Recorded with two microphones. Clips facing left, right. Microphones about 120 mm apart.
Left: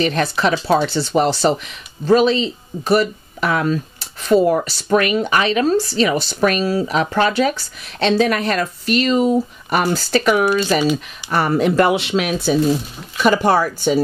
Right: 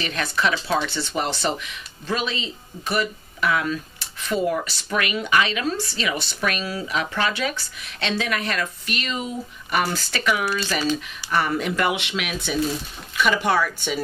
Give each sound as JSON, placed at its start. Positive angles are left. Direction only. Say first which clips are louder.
{"t": 0.0, "sound": "speech", "louder": "left 7 dB", "side_deg": 35}